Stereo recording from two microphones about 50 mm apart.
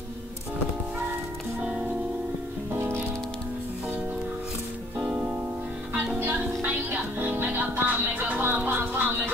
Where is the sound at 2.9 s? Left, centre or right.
Right.